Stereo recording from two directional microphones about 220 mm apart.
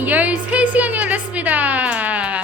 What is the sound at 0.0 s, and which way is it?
Music, 5° right (ahead or behind).